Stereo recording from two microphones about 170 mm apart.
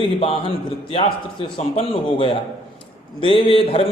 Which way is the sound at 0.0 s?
30° left (ahead or behind).